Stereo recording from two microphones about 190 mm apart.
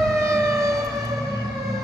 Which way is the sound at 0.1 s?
15° right (ahead or behind).